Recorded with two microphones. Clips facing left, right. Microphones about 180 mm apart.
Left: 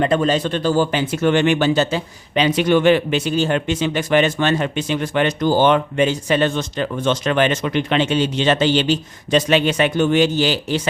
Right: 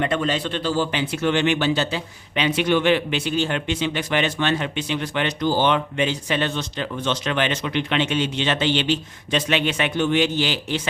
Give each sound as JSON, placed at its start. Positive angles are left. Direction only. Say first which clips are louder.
{"t": 0.0, "sound": "speech", "louder": "left 5 dB", "side_deg": 40}